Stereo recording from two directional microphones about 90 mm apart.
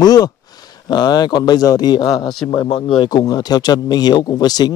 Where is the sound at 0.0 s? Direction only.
45° left (ahead or behind).